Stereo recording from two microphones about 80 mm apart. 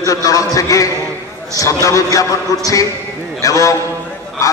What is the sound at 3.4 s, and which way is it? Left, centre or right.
Speech, left.